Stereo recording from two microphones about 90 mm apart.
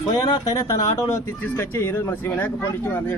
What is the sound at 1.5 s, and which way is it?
Speech, 25° left (ahead or behind).